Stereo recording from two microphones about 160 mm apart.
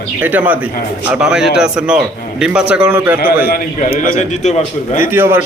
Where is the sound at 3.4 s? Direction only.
65° left (ahead or behind).